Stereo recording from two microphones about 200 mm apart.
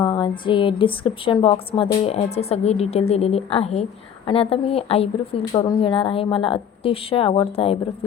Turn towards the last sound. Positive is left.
turn(degrees=30)  # may be behind; listen again after turning